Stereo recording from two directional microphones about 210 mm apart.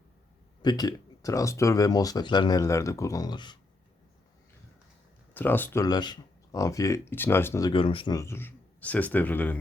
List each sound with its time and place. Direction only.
0.6 s speech: 20° left (ahead or behind)
5.3 s speech: 10° left (ahead or behind)
7.7 s speech: 25° left (ahead or behind); by 9.6 s 10° left (ahead or behind)